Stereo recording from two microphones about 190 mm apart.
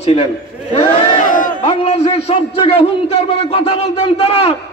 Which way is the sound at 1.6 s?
30° left (ahead or behind).